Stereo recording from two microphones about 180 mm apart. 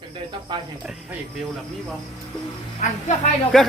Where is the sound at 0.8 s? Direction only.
5° right (ahead or behind).